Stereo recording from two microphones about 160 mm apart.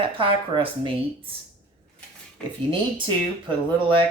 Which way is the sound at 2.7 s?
30° right (ahead or behind).